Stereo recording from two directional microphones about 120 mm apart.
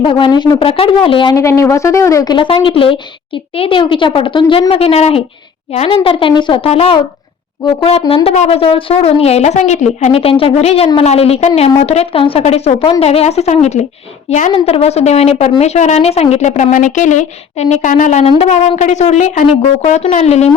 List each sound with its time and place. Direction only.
0.0 s speech: 45° left (ahead or behind)
0.6 s a woman's voice: 50° left (ahead or behind)
1.3 s speech: 25° left (ahead or behind)
2.3 s a woman's voice: 45° left (ahead or behind)
4.7 s speech: 55° left (ahead or behind)
6.0 s a woman's voice: 45° left (ahead or behind)
6.7 s speech: 55° left (ahead or behind); by 10.2 s 75° left (ahead or behind)
10.2 s a woman's voice: 50° left (ahead or behind); by 14.5 s 80° left
14.5 s speech: 55° left (ahead or behind); by 18.3 s 90° left
18.3 s speech: 65° left (ahead or behind)
18.8 s speech: 75° left (ahead or behind)